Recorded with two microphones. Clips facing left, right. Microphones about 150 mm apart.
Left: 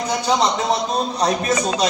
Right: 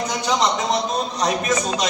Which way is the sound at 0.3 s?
35° left (ahead or behind).